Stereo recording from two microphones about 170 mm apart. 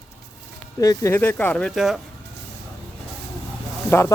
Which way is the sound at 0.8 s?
20° left (ahead or behind).